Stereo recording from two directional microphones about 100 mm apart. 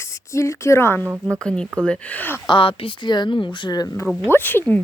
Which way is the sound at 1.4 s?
10° left (ahead or behind).